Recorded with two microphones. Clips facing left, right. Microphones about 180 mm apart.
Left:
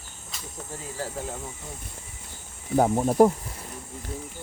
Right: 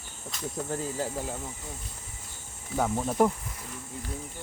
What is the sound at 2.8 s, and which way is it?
Speech, 40° left (ahead or behind).